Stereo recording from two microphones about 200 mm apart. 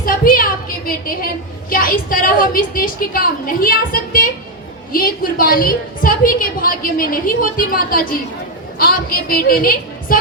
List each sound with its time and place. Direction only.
0.0 s a woman's voice: 45° left (ahead or behind)